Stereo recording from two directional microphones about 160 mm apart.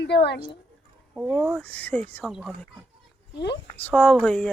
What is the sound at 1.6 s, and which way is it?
Speech, 10° left (ahead or behind).